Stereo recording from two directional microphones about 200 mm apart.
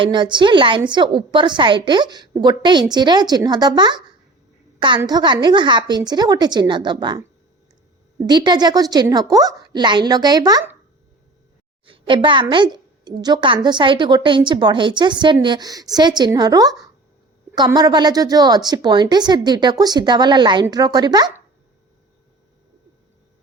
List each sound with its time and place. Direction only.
0.0 s a woman's voice: 25° right (ahead or behind)
8.3 s a woman's voice: 20° right (ahead or behind)
11.9 s a woman's voice: 25° right (ahead or behind)